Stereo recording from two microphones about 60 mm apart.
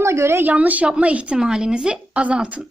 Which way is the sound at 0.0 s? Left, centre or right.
Right.